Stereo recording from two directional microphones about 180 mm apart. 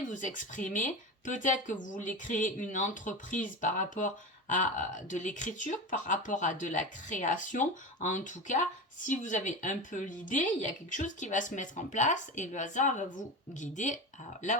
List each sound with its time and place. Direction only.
0.1 s speech: 45° left (ahead or behind)